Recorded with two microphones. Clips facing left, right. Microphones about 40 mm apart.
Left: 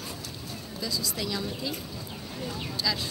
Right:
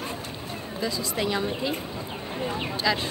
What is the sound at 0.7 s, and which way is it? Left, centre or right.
Speech, right.